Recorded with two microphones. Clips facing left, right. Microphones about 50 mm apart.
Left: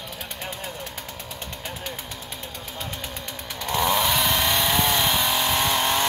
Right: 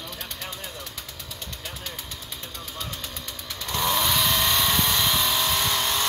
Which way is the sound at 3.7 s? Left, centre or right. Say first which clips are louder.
Left 3 dB; centre.